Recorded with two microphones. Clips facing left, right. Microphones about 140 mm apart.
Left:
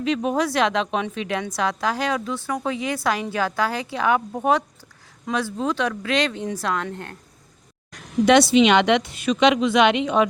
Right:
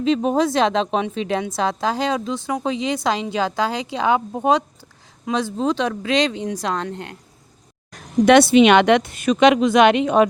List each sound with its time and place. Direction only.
0.0 s a woman's voice: 30° right (ahead or behind)
8.2 s a woman's voice: 55° right (ahead or behind)